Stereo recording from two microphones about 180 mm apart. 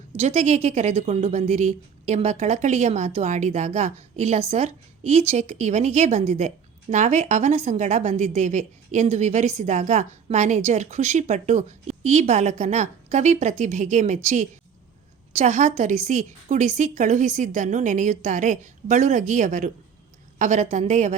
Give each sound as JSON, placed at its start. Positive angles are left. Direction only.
{"t": 0.2, "sound": "a woman's voice", "side_deg": -35}
{"t": 15.3, "sound": "a woman's voice", "side_deg": -40}